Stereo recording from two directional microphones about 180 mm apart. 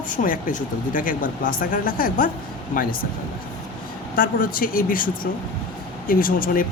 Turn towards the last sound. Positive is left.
turn(degrees=50)  # may be behind; listen again after turning